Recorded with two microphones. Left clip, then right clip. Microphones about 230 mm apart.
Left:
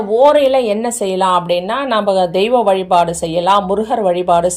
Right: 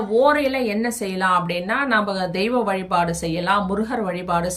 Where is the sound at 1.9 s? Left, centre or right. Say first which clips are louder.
Left 8 dB; centre.